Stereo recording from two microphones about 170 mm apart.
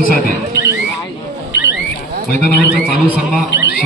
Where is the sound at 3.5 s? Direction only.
90° left.